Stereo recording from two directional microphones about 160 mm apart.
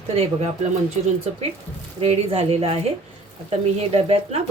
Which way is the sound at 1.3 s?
40° right (ahead or behind).